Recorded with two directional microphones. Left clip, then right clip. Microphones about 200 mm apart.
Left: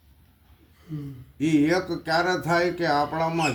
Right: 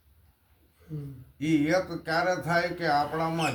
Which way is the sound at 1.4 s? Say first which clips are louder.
Left 3 dB; 15° right (ahead or behind).